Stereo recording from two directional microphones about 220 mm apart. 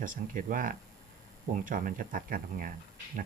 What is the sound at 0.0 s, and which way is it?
Speech, 40° right (ahead or behind).